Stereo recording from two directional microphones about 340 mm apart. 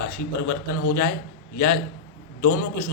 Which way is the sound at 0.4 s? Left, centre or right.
Left.